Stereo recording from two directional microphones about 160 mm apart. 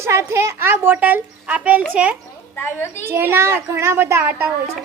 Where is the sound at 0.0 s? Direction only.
15° right (ahead or behind).